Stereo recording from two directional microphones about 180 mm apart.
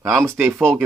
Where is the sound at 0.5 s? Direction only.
Centre (ahead or behind).